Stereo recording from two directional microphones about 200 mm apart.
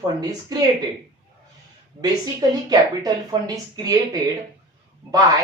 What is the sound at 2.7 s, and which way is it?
Speech, 20° right (ahead or behind).